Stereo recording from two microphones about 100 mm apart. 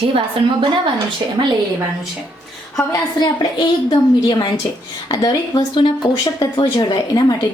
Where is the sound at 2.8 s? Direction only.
40° left (ahead or behind).